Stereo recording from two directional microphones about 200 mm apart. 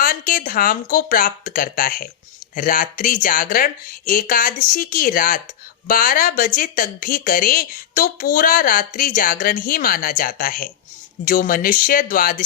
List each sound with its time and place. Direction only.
0.0 s speech: 45° left (ahead or behind)